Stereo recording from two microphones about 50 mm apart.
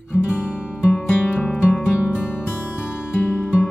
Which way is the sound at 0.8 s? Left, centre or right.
Left.